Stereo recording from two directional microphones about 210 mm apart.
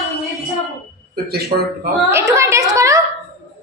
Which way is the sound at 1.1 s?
50° right (ahead or behind).